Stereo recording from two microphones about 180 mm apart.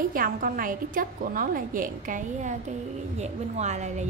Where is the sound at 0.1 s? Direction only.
50° right (ahead or behind).